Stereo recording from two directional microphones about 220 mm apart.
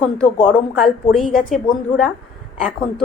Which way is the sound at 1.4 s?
35° left (ahead or behind).